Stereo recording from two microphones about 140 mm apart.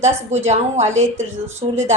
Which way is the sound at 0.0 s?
50° right (ahead or behind).